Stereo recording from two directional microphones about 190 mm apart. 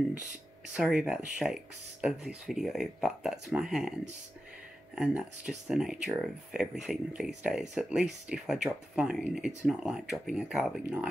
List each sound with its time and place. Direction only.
0.7 s speech: 5° right (ahead or behind)
4.9 s speech: 5° right (ahead or behind)